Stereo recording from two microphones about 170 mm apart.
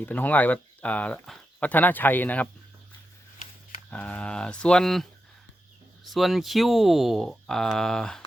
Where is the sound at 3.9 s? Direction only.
5° left (ahead or behind).